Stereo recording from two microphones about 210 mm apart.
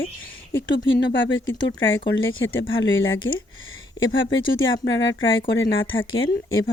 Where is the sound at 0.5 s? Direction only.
60° left (ahead or behind).